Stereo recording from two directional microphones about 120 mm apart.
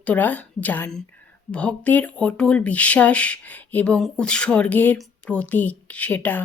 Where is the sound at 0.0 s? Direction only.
15° left (ahead or behind).